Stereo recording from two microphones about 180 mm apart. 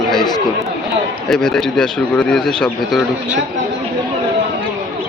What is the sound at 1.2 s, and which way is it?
Speech, 5° left (ahead or behind).